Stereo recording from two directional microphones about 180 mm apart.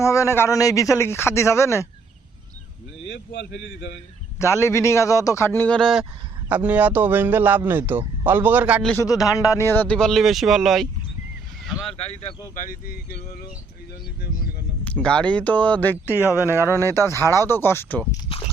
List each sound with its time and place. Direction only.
0.0 s speech: 15° left (ahead or behind)
3.1 s speech: 75° left (ahead or behind)
4.4 s a man's voice: 15° left (ahead or behind); by 8.9 s 5° right (ahead or behind)
9.0 s speech: 20° left (ahead or behind); by 10.8 s centre (ahead or behind)
11.7 s vehicle: centre (ahead or behind)
12.0 s speech: 35° left (ahead or behind); by 13.5 s 60° left (ahead or behind)
15.0 s speech: 5° left (ahead or behind)
16.4 s a man's voice: 15° right (ahead or behind)
16.6 s speech: 15° left (ahead or behind)
18.3 s biting: 30° left (ahead or behind)